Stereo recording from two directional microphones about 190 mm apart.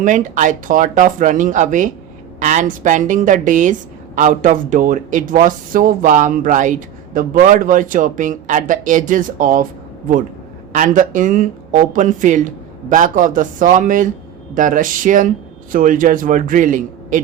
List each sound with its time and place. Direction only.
0.0 s a woman's voice: 40° right (ahead or behind)
10.7 s a woman's voice: 45° right (ahead or behind)